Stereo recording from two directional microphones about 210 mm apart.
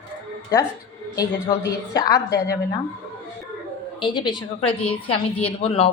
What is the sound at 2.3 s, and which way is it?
Speech, 50° left (ahead or behind).